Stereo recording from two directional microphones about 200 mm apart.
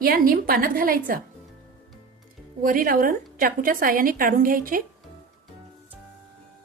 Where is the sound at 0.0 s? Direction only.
45° right (ahead or behind).